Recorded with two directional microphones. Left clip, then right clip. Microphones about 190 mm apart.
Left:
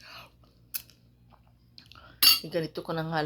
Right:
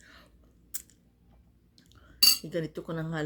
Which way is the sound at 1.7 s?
25° right (ahead or behind).